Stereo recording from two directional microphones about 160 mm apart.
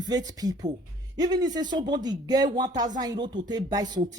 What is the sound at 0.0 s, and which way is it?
Speech, 25° right (ahead or behind).